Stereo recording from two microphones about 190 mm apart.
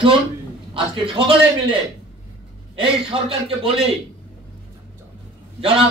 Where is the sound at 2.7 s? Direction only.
30° right (ahead or behind).